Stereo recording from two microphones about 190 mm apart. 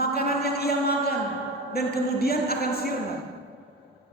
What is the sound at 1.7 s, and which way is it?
A man's voice, 55° left (ahead or behind).